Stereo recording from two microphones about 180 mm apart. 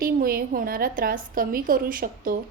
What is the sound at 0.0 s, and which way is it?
A woman's voice, 55° right (ahead or behind).